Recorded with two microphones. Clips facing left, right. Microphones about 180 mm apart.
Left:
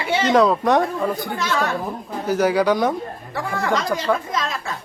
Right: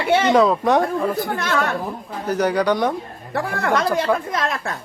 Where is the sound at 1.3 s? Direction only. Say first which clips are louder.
Right 1 dB; 55° right (ahead or behind).